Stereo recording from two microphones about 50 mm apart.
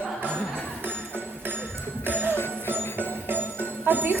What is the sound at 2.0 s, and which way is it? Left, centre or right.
Music, right.